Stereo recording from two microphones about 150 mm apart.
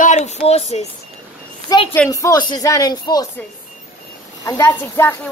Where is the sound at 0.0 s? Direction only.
50° left (ahead or behind).